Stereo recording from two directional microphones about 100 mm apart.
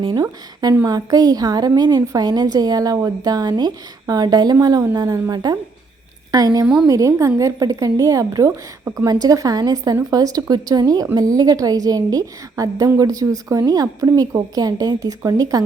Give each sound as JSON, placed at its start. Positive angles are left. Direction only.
{"t": 0.0, "sound": "a woman's voice", "side_deg": -45}